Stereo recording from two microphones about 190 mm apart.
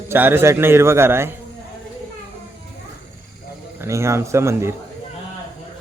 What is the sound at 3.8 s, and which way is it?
Speech, 15° right (ahead or behind).